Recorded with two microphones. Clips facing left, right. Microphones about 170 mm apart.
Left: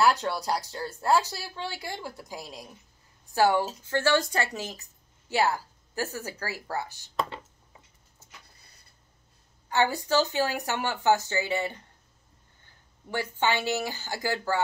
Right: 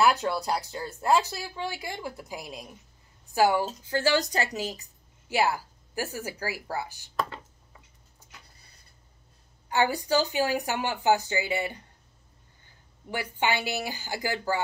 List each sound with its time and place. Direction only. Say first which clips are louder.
0.0 s a woman's voice: right 1 dB; 15° right (ahead or behind)
9.7 s speech: even; 15° right (ahead or behind)
13.1 s speech: left 1 dB; 15° right (ahead or behind)